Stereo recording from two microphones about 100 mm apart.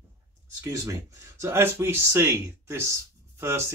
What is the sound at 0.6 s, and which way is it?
Speech, 30° right (ahead or behind).